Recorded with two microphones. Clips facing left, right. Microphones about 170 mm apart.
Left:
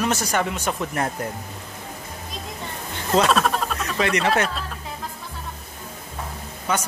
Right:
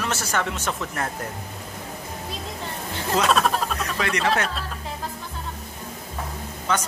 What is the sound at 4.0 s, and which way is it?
Speech, 20° left (ahead or behind).